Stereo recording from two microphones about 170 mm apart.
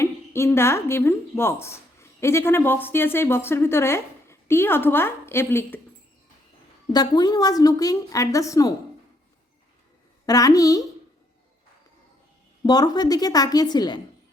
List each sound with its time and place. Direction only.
0.0 s a woman's voice: 15° left (ahead or behind)
6.9 s a woman's voice: 25° left (ahead or behind)
10.2 s a woman's voice: 20° left (ahead or behind)
12.6 s a woman's voice: 25° left (ahead or behind)